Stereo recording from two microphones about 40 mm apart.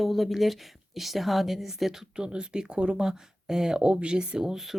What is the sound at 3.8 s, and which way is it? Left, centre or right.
Speech, right.